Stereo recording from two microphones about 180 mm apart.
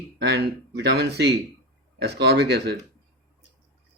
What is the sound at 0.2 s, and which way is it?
Speech, 70° right (ahead or behind).